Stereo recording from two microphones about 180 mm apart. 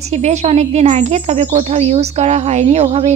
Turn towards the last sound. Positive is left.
turn(degrees=-35)  # may be behind; listen again after turning